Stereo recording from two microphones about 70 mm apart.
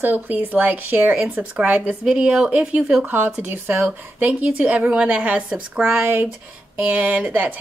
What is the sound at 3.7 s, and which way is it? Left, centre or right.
A woman's voice, right.